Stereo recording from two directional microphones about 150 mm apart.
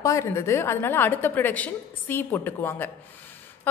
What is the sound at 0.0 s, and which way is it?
A woman's voice, 20° left (ahead or behind).